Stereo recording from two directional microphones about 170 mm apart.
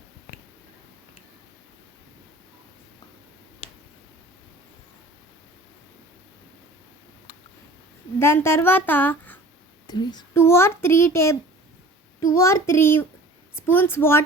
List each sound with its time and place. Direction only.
8.2 s a child's voice: 15° left (ahead or behind)
9.8 s a child's voice: 25° left (ahead or behind)
12.4 s a child's voice: 15° left (ahead or behind)